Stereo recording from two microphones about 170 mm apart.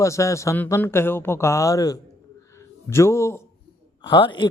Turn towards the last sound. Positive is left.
turn(degrees=25)  # may be behind; listen again after turning